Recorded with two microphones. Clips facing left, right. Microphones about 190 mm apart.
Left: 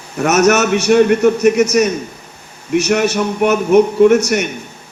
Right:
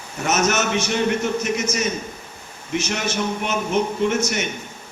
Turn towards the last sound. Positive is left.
turn(degrees=65)  # may be behind; listen again after turning